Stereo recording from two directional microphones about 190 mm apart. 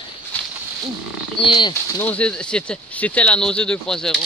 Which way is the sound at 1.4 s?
25° left (ahead or behind).